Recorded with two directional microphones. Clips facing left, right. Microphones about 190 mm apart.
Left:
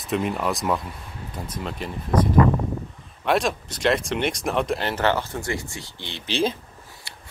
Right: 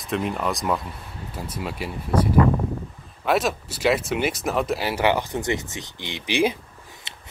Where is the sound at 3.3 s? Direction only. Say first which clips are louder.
Even; 5° right (ahead or behind).